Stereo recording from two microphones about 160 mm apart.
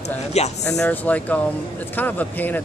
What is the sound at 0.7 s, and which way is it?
Speech, 10° left (ahead or behind).